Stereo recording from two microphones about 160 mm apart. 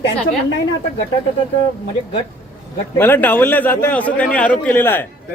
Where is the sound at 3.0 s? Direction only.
10° left (ahead or behind).